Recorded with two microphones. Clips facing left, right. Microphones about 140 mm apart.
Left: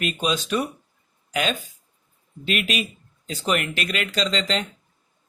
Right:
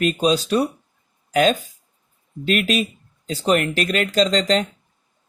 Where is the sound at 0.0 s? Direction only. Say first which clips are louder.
Right 7 dB; 40° right (ahead or behind).